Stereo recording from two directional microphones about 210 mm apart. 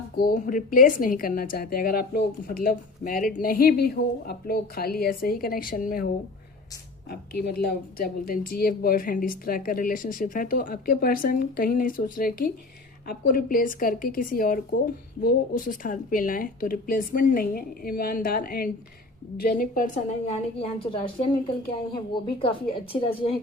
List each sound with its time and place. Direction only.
0.2 s a woman's voice: 40° left (ahead or behind)
7.1 s a woman's voice: 50° left (ahead or behind); by 23.1 s 25° left (ahead or behind)